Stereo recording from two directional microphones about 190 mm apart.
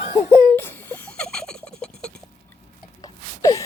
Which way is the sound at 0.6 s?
10° left (ahead or behind).